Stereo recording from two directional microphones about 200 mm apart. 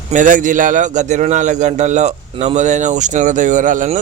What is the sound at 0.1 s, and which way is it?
A man's voice, 40° right (ahead or behind).